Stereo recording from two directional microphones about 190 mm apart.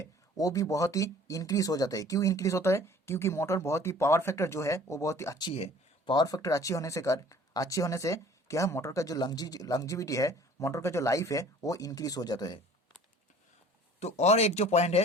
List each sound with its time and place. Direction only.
0.0 s speech: 20° left (ahead or behind)
14.0 s speech: 35° left (ahead or behind)